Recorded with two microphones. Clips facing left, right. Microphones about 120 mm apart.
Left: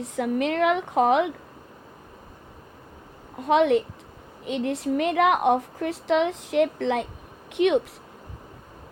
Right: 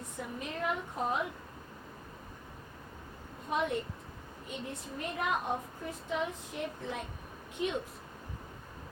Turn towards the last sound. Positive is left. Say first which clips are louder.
# left 14 dB
turn(degrees=80)